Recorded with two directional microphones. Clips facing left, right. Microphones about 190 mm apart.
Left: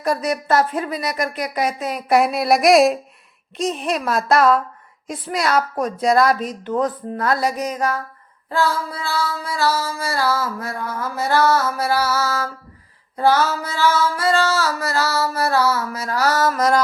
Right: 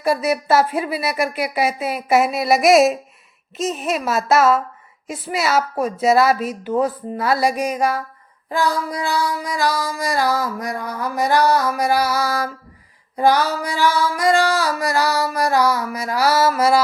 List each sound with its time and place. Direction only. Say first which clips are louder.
0.0 s music: right 2 dB; 5° right (ahead or behind)
3.6 s a woman's voice: even; 5° right (ahead or behind)
5.0 s music: even; 5° right (ahead or behind)